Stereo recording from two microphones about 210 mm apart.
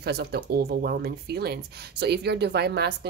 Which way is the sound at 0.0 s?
50° right (ahead or behind).